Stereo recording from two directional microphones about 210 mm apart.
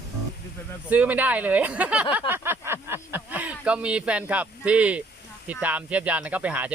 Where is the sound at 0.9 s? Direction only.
5° right (ahead or behind).